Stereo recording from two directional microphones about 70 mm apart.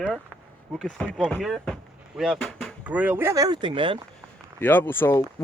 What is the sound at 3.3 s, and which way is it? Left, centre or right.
Speech, right.